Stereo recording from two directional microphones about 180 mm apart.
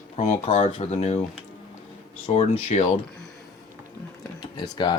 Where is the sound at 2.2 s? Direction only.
40° left (ahead or behind).